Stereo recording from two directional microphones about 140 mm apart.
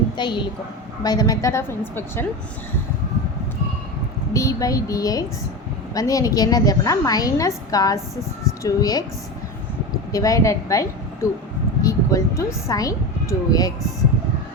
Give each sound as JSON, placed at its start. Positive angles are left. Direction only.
{"t": 0.2, "sound": "a woman's voice", "side_deg": 35}
{"t": 4.4, "sound": "a woman's voice", "side_deg": 25}
{"t": 10.1, "sound": "a woman's voice", "side_deg": 25}